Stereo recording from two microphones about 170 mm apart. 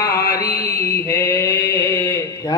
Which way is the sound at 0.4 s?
20° left (ahead or behind).